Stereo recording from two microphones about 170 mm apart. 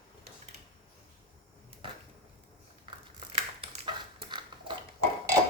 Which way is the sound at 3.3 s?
30° right (ahead or behind).